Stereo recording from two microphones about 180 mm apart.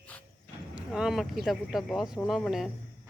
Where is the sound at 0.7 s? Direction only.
5° right (ahead or behind).